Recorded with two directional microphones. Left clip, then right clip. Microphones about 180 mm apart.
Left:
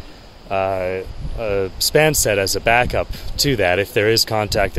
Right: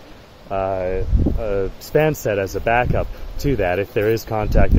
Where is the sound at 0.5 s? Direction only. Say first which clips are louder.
Left 2 dB; 10° left (ahead or behind).